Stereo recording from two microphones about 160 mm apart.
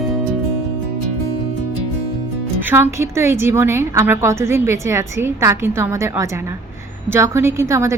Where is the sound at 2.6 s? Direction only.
15° right (ahead or behind).